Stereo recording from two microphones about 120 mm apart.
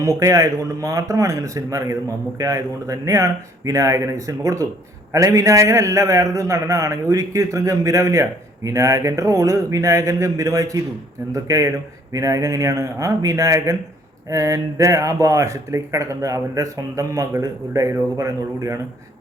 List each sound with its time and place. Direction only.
0.0 s speech: 25° right (ahead or behind)